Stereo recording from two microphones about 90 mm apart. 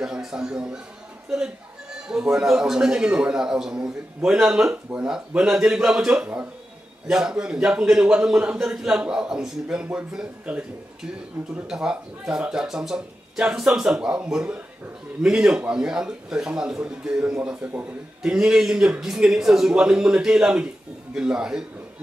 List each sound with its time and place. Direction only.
0.0 s a man's voice: 5° right (ahead or behind)
2.0 s a man's voice: 5° right (ahead or behind)
17.4 s a man's voice: 20° right (ahead or behind)